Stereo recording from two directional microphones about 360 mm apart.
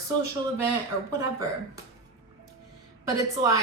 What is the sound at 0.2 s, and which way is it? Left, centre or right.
Speech, left.